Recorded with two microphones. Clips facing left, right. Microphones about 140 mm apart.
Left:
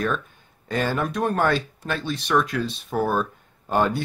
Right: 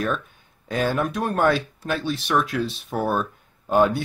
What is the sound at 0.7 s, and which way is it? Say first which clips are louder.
Speech: right 1 dB; centre (ahead or behind).